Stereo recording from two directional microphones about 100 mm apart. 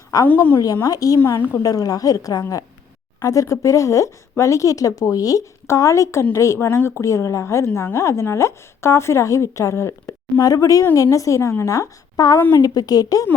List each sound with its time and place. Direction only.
0.1 s speech: 35° left (ahead or behind)
1.2 s speech: 25° left (ahead or behind)
1.6 s speech: 40° left (ahead or behind)